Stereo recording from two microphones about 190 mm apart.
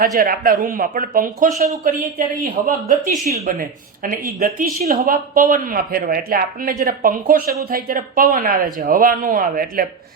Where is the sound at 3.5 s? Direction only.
50° right (ahead or behind).